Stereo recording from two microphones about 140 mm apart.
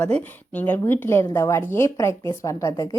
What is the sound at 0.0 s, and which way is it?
A woman's voice, 10° left (ahead or behind).